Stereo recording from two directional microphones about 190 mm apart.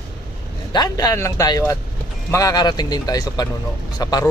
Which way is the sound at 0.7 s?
20° left (ahead or behind).